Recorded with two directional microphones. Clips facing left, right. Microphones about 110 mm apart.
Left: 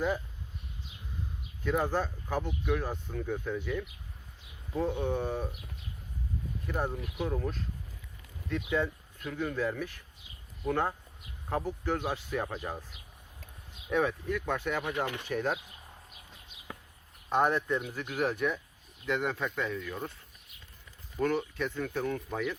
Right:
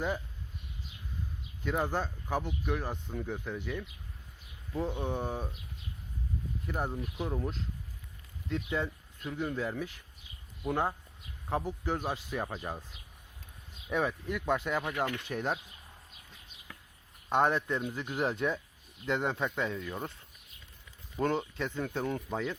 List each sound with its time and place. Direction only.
1.7 s speech: 15° right (ahead or behind)
4.7 s speech: 15° left (ahead or behind)
4.9 s speech: 15° right (ahead or behind)
6.7 s speech: 10° right (ahead or behind)
13.9 s speech: 15° right (ahead or behind)
14.9 s speech: 15° left (ahead or behind)
15.3 s speech: 15° right (ahead or behind)
17.2 s speech: 20° right (ahead or behind)
21.2 s speech: 25° right (ahead or behind)